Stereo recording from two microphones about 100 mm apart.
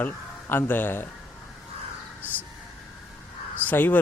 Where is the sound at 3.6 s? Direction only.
15° left (ahead or behind).